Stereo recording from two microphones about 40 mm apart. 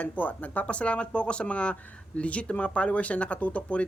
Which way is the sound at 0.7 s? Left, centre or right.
Left.